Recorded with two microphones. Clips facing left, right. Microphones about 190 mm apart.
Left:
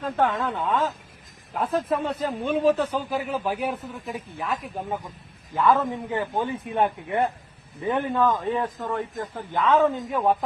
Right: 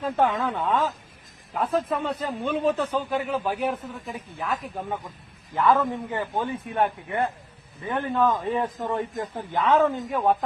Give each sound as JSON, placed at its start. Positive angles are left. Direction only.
{"t": 0.0, "sound": "a man's voice", "side_deg": -10}
{"t": 8.1, "sound": "a man's voice", "side_deg": 0}
{"t": 8.9, "sound": "speech", "side_deg": -20}
{"t": 9.7, "sound": "a man's voice", "side_deg": 0}